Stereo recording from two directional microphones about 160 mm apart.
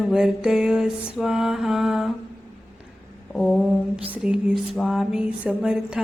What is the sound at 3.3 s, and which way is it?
Lullaby, 5° left (ahead or behind).